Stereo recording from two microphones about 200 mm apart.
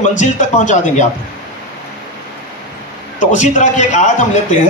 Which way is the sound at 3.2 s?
40° left (ahead or behind).